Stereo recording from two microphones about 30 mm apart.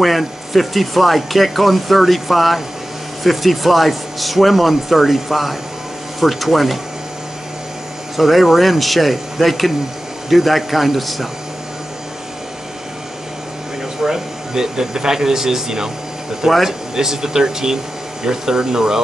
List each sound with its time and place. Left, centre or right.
0.0 s speech: centre
8.2 s speech: centre
14.0 s speech: centre
16.4 s speech: centre
16.9 s speech: centre